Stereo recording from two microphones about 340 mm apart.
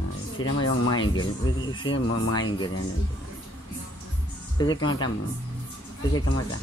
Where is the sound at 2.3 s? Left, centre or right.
Centre.